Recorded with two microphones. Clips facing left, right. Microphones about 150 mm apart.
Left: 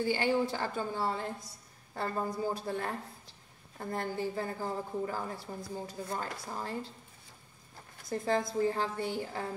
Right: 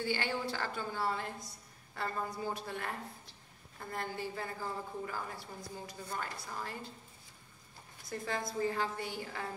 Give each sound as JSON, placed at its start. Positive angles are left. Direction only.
{"t": 0.0, "sound": "a woman's voice", "side_deg": 15}
{"t": 0.7, "sound": "a woman's voice", "side_deg": 30}
{"t": 8.1, "sound": "a woman's voice", "side_deg": 35}